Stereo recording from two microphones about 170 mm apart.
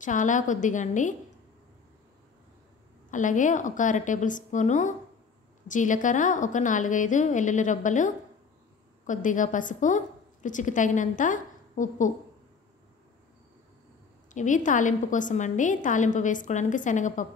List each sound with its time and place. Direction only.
0.0 s a woman's voice: 50° left (ahead or behind)
3.1 s a woman's voice: 50° left (ahead or behind)
14.3 s a woman's voice: 45° left (ahead or behind)